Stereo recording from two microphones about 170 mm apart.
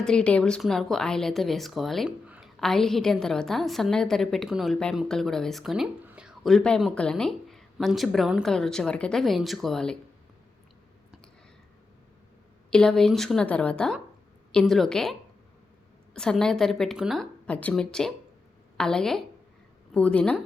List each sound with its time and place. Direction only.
0.0 s speech: 5° left (ahead or behind)
12.7 s speech: 5° left (ahead or behind)
16.1 s speech: 5° left (ahead or behind)